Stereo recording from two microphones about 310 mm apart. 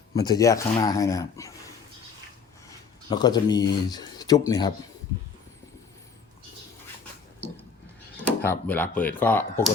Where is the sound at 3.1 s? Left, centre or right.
Centre.